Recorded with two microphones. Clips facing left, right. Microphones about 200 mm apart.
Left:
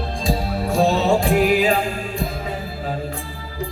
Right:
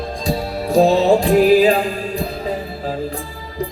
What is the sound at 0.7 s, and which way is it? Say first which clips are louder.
Music: right 5 dB; 35° right (ahead or behind).